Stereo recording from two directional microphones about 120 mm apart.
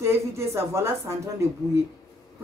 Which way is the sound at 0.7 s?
20° right (ahead or behind).